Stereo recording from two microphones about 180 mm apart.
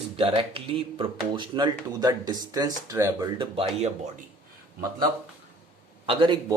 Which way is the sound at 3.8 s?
40° right (ahead or behind).